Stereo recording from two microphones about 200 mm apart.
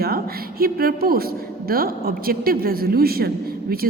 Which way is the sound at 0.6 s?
50° right (ahead or behind).